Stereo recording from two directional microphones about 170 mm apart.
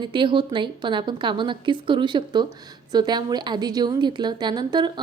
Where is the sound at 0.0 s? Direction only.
30° right (ahead or behind).